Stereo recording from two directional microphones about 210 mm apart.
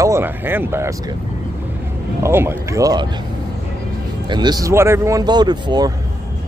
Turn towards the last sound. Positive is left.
turn(degrees=-20)  # may be behind; listen again after turning